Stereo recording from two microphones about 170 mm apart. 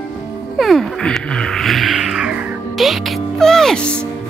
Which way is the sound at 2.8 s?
Centre (ahead or behind).